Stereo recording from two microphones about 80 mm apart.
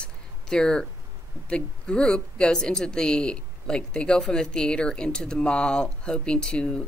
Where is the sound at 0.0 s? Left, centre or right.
Centre.